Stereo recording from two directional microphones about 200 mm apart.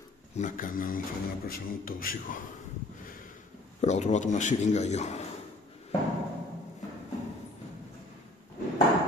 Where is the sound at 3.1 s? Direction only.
40° left (ahead or behind).